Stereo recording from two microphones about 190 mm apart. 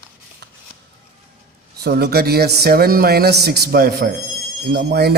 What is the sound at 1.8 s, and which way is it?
A man's voice, 60° right (ahead or behind).